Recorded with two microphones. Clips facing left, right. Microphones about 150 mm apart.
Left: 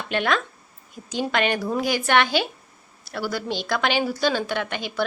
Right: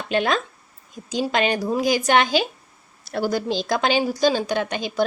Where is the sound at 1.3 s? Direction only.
15° right (ahead or behind).